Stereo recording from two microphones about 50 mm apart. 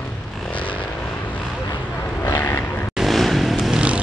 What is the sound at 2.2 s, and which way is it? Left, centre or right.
Vehicle, left.